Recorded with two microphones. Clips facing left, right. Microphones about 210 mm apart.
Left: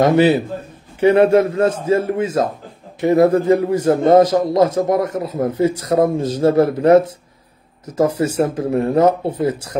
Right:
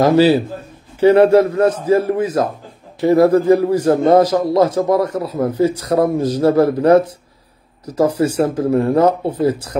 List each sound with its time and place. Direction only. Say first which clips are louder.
0.0 s a man's voice: right 1 dB; 20° left (ahead or behind)